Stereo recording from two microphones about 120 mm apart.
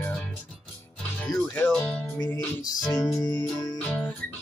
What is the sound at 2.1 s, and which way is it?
Music, 30° left (ahead or behind).